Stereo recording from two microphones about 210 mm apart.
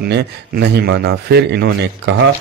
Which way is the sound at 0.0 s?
55° right (ahead or behind).